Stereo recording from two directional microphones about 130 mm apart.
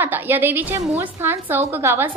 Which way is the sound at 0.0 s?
15° right (ahead or behind).